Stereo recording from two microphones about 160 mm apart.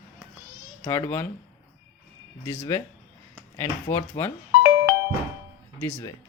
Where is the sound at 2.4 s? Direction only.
15° left (ahead or behind).